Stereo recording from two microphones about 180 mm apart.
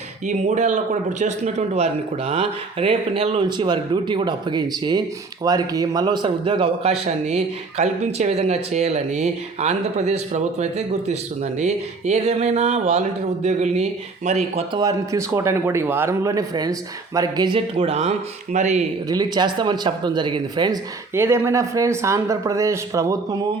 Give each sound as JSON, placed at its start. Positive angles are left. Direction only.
{"t": 0.3, "sound": "speech", "side_deg": -45}
{"t": 14.8, "sound": "speech", "side_deg": -20}
{"t": 19.0, "sound": "speech", "side_deg": -20}
{"t": 21.2, "sound": "speech", "side_deg": -15}